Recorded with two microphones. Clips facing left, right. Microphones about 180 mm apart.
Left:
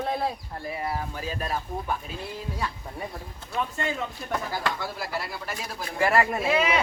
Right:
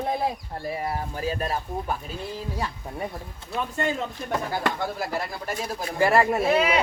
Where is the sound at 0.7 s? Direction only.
40° right (ahead or behind).